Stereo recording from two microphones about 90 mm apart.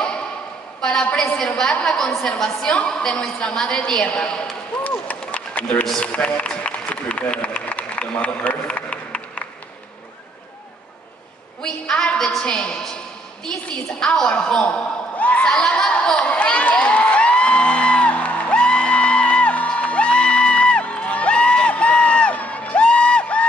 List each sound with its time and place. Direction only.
0.7 s a woman's voice: 10° left (ahead or behind)
11.6 s a woman's voice: 10° left (ahead or behind)
13.5 s a sound: 10° left (ahead or behind)